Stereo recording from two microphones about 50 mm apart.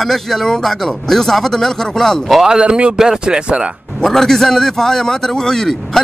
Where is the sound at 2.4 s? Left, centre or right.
Centre.